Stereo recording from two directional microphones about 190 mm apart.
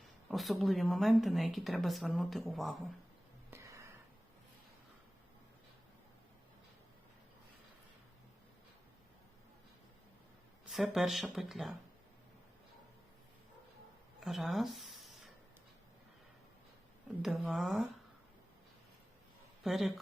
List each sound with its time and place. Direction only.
0.0 s a woman's voice: centre (ahead or behind)
3.5 s a sound: 15° right (ahead or behind)
10.7 s a woman's voice: centre (ahead or behind)
14.2 s speech: centre (ahead or behind)
17.2 s a woman's voice: centre (ahead or behind)
19.6 s a woman's voice: centre (ahead or behind)